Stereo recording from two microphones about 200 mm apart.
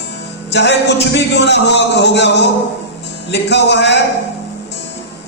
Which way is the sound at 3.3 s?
60° left (ahead or behind).